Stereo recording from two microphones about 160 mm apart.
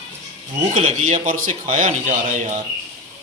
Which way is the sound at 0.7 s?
45° right (ahead or behind).